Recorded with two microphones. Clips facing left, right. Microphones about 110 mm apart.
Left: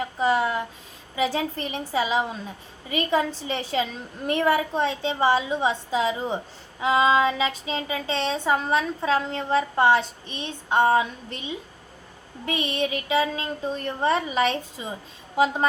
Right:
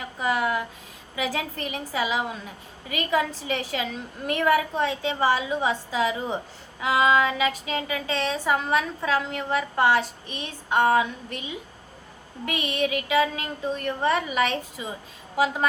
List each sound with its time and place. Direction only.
0.2 s a woman's voice: 25° left (ahead or behind)